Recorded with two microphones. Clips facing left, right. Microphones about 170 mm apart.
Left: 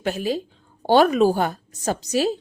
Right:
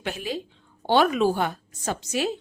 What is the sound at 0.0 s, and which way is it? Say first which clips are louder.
A woman's voice: left 6 dB; 40° left (ahead or behind).